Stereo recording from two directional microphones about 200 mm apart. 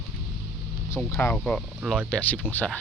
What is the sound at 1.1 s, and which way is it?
Speech, 5° left (ahead or behind).